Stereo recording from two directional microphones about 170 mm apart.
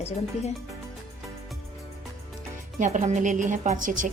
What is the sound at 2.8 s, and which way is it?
A woman's voice, 45° right (ahead or behind).